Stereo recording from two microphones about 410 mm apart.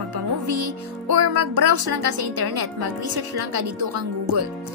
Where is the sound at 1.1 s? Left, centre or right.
Right.